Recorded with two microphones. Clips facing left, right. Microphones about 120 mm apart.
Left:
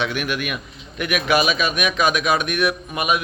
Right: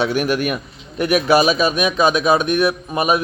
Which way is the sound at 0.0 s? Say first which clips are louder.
Right 6 dB; 35° right (ahead or behind).